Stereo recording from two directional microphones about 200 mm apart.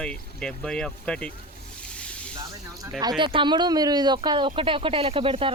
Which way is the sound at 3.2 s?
25° right (ahead or behind).